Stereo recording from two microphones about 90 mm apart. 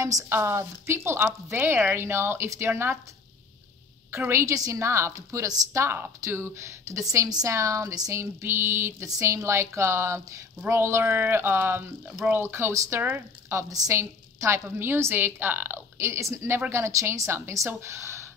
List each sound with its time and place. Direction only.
0.3 s a woman's voice: 25° right (ahead or behind)
4.2 s a woman's voice: 30° right (ahead or behind)